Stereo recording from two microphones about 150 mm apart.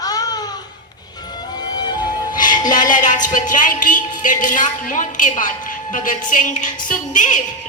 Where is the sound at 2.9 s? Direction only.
60° left (ahead or behind).